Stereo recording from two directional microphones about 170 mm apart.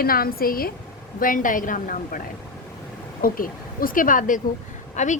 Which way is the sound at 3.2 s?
55° left (ahead or behind).